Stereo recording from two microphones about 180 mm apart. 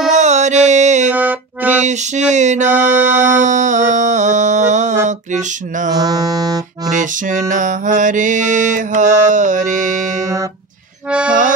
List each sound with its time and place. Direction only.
0.1 s music: 40° right (ahead or behind)
1.1 s music: 10° right (ahead or behind)
1.8 s music: 40° right (ahead or behind)
5.9 s music: 20° right (ahead or behind)
6.9 s mantra: 45° right (ahead or behind)
11.1 s music: 5° right (ahead or behind)